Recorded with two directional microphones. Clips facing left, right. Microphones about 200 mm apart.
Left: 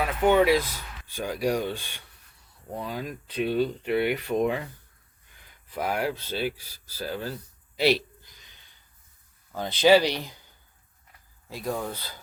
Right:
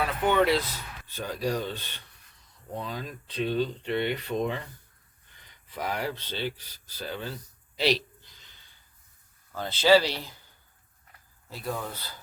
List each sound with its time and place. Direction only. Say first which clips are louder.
0.3 s speech: left 4 dB; 10° left (ahead or behind)
5.7 s speech: left 4 dB; 10° left (ahead or behind)
9.6 s speech: left 2 dB; 15° left (ahead or behind)
11.4 s speech: left 3 dB; 15° left (ahead or behind)